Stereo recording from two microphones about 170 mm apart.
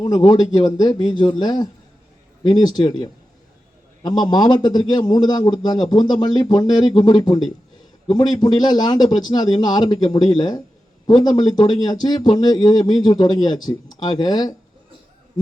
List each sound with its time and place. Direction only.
0.0 s a man's voice: 25° left (ahead or behind)
4.0 s a man's voice: 25° left (ahead or behind)